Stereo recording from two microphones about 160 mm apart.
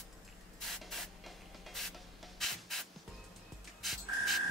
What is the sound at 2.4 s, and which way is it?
Spray, centre (ahead or behind).